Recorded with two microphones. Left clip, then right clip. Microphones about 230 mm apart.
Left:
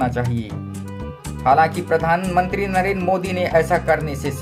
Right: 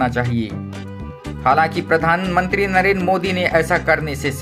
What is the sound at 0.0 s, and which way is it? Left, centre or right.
Speech, centre.